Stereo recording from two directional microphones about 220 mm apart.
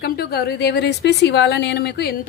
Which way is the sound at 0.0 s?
45° left (ahead or behind).